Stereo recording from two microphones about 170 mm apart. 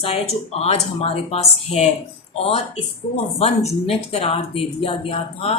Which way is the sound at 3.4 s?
35° left (ahead or behind).